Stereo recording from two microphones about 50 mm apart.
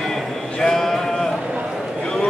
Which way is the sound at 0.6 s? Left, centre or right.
Centre.